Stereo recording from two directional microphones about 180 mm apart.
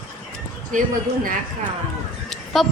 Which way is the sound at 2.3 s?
Centre (ahead or behind).